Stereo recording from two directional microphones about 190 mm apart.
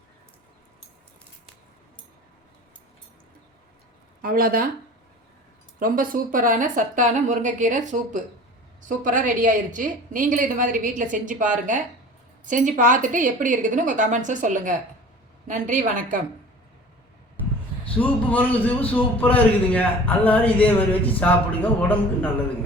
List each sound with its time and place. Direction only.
4.2 s speech: 50° right (ahead or behind)
5.8 s a woman's voice: 45° right (ahead or behind)
17.9 s a man's voice: 10° left (ahead or behind)